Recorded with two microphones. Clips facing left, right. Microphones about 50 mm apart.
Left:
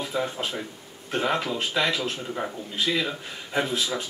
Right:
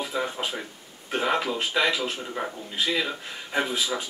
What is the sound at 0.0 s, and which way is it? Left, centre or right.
Speech, centre.